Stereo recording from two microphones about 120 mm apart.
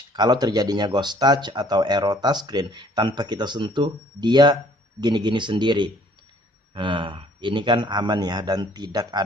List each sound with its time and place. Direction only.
0.1 s speech: 35° right (ahead or behind)